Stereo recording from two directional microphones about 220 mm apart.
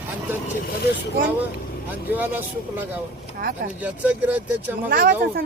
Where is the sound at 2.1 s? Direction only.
10° right (ahead or behind).